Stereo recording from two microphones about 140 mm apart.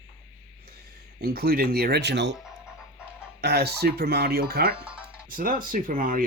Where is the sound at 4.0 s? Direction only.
90° right.